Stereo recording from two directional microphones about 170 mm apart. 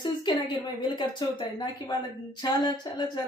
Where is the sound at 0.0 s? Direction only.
25° left (ahead or behind).